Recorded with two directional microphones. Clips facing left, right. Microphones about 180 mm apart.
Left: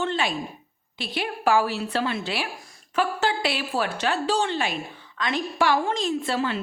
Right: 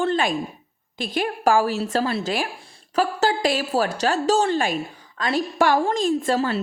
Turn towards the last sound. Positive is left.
turn(degrees=-40)  # may be behind; listen again after turning